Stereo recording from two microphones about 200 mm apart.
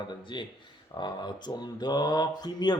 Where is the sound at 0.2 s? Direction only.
25° left (ahead or behind).